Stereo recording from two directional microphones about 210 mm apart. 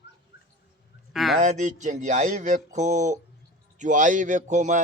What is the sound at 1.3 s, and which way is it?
A man's voice, 35° right (ahead or behind).